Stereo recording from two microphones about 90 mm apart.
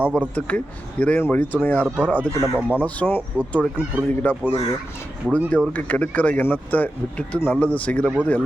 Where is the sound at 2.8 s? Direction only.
15° left (ahead or behind).